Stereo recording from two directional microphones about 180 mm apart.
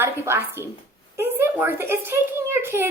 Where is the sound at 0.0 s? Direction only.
15° right (ahead or behind).